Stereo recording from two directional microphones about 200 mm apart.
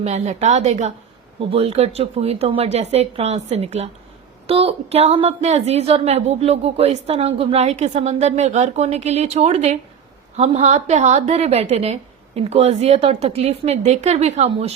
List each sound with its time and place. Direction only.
0.0 s a woman's voice: 35° right (ahead or behind)